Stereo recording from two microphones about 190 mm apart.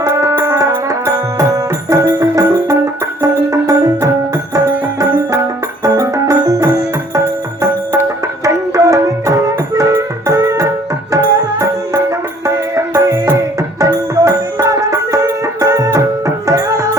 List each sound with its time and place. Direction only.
0.0 s music: 15° right (ahead or behind)
8.4 s music: 15° right (ahead or behind)